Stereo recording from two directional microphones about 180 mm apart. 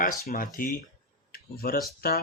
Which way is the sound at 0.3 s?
50° left (ahead or behind).